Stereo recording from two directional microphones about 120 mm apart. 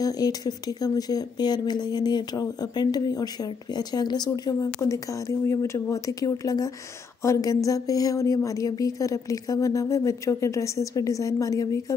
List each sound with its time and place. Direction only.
0.0 s speech: 30° left (ahead or behind)